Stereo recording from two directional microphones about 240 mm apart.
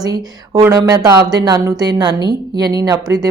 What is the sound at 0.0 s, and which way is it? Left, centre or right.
Speech, centre.